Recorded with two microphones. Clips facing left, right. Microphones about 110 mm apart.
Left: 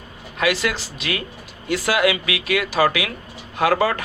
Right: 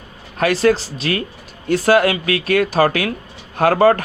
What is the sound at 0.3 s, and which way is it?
Speech, 40° right (ahead or behind).